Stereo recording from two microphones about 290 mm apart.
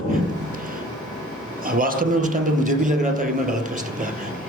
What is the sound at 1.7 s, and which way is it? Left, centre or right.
A man's voice, right.